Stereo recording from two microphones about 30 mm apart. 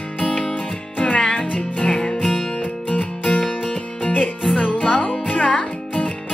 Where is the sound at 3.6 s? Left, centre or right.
Left.